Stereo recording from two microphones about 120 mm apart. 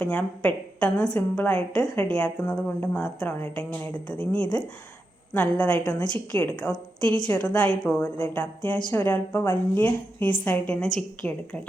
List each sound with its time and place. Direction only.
0.0 s a woman's voice: 10° left (ahead or behind)